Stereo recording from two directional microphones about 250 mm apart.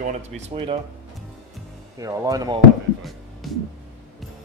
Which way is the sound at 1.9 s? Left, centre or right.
Centre.